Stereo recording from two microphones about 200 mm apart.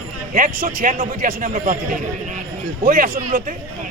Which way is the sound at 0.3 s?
45° right (ahead or behind).